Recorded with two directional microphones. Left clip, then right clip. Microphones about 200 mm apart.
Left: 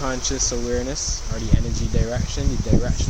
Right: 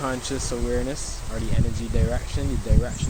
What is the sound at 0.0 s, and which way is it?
Speech, centre (ahead or behind).